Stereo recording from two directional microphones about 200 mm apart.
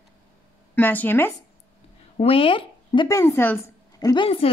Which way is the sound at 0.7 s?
10° left (ahead or behind).